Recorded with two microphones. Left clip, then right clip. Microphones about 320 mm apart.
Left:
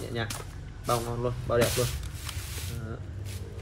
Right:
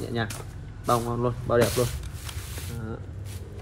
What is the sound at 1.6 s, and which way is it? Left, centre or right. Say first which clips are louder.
Speech: right 2 dB; centre.